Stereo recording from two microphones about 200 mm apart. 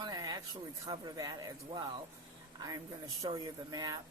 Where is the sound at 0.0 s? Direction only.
20° right (ahead or behind).